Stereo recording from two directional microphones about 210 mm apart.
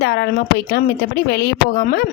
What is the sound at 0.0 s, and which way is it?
Speech, 50° left (ahead or behind).